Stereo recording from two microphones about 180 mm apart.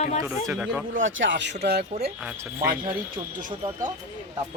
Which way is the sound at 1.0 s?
90° right.